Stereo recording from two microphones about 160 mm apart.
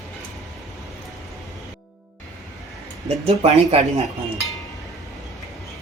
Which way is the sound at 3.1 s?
40° right (ahead or behind).